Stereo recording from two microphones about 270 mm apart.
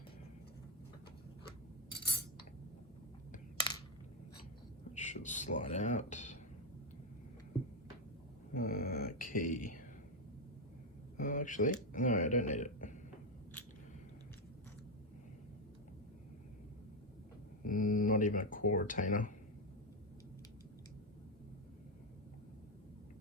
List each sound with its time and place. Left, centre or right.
4.9 s speech: left
8.5 s speech: left
11.2 s speech: left
17.6 s a sound: left
18.7 s speech: left